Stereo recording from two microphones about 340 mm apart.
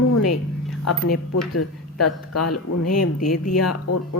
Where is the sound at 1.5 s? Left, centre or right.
Left.